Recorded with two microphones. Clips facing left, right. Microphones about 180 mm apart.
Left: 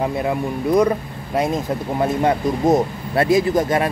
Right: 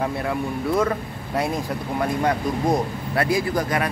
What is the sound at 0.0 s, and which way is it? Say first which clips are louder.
Speech: left 4 dB; 20° left (ahead or behind).